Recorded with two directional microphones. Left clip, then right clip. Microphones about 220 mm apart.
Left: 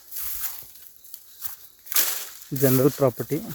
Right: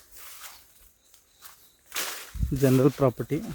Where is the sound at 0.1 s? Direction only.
55° left (ahead or behind).